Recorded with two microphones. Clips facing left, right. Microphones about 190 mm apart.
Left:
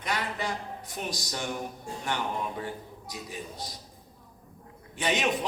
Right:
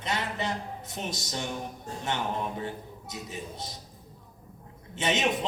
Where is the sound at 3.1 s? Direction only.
25° right (ahead or behind).